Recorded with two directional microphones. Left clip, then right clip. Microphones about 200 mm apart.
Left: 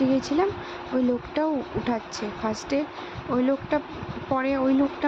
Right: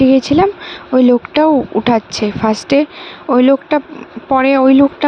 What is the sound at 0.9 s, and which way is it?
Speech, 45° right (ahead or behind).